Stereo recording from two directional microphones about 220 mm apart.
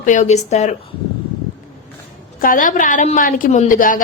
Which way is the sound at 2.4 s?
40° left (ahead or behind).